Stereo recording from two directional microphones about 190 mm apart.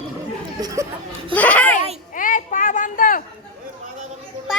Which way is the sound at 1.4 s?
5° left (ahead or behind).